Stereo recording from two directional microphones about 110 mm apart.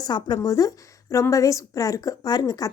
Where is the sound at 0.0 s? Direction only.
40° left (ahead or behind).